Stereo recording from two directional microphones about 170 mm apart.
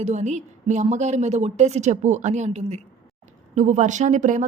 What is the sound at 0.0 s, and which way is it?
Speech, 45° right (ahead or behind).